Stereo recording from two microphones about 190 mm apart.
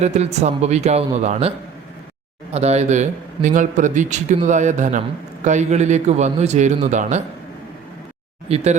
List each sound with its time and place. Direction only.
0.0 s speech: 35° right (ahead or behind)
8.4 s speech: 35° right (ahead or behind)